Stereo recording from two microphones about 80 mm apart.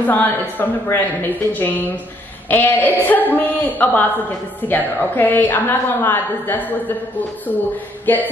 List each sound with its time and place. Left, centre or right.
0.0 s a woman's voice: left
8.1 s a woman's voice: left